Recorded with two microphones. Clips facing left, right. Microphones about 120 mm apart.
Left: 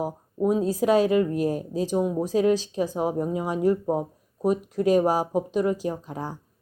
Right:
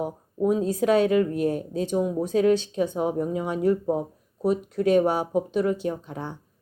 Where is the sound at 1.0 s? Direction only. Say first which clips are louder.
Even; 5° left (ahead or behind).